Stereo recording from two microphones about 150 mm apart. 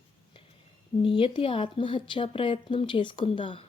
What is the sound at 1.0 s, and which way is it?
A woman's voice, 35° left (ahead or behind).